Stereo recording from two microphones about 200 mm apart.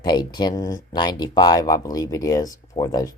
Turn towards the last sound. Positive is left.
turn(degrees=20)  # may be behind; listen again after turning